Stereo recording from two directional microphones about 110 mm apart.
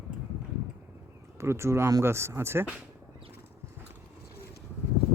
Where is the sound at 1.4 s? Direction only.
25° right (ahead or behind).